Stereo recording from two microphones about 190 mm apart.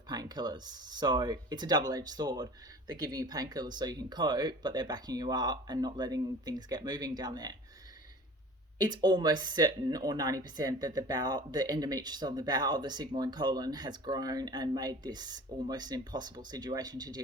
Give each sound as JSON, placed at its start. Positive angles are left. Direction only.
{"t": 0.1, "sound": "speech", "side_deg": -20}
{"t": 8.8, "sound": "speech", "side_deg": -20}